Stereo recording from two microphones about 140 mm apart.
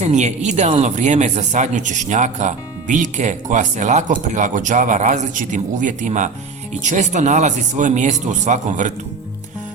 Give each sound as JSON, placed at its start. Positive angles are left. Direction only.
{"t": 0.0, "sound": "speech", "side_deg": -55}